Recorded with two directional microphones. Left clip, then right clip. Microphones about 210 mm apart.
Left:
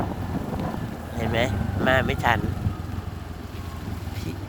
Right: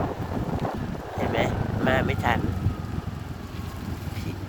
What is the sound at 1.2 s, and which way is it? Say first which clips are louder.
Vehicle: left 1 dB; 15° left (ahead or behind).